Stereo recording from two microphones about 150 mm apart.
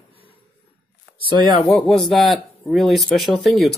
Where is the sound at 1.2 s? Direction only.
30° right (ahead or behind).